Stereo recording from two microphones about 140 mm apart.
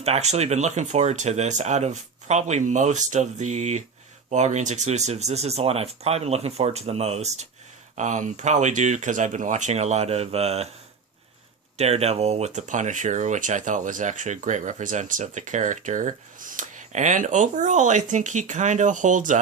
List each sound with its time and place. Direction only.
0.0 s speech: 50° right (ahead or behind)
11.8 s speech: 50° right (ahead or behind); by 19.4 s 65° right (ahead or behind)